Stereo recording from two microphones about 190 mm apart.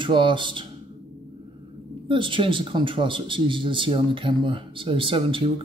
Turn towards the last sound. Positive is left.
turn(degrees=-30)  # may be behind; listen again after turning